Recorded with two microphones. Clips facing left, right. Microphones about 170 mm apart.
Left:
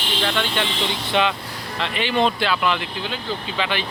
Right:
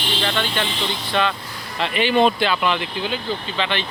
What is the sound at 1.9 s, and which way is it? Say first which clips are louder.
Speech: right 4 dB; 5° right (ahead or behind).